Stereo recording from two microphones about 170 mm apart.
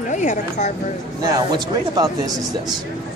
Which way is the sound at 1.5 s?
25° right (ahead or behind).